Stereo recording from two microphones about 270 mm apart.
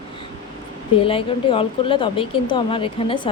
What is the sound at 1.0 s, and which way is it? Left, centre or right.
Speech, centre.